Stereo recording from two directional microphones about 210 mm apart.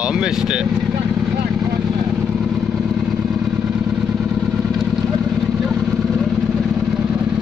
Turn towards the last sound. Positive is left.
turn(degrees=-5)  # may be behind; listen again after turning